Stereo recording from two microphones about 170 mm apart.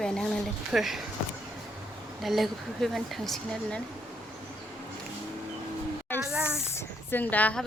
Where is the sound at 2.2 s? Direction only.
Centre (ahead or behind).